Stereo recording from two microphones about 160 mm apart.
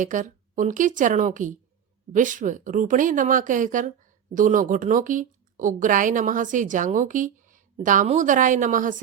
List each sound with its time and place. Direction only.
0.0 s a woman's voice: 50° right (ahead or behind)